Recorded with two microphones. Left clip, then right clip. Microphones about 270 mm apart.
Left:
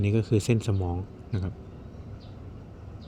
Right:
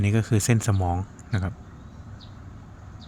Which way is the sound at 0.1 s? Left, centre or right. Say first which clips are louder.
Left 1 dB; right.